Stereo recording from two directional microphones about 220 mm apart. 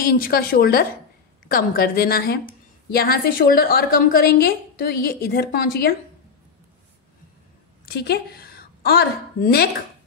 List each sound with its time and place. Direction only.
0.0 s a woman's voice: 40° left (ahead or behind)
7.9 s a woman's voice: 45° left (ahead or behind)